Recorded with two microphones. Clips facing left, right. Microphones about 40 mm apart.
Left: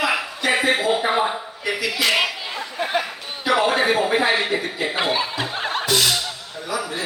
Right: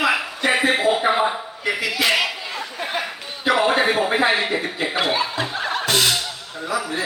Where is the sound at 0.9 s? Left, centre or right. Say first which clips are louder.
Right 1 dB; centre.